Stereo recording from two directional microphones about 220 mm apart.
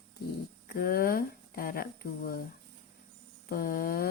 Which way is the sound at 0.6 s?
45° left (ahead or behind).